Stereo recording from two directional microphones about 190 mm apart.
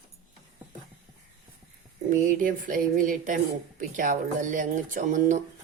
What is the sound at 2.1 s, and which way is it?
Speech, 45° right (ahead or behind).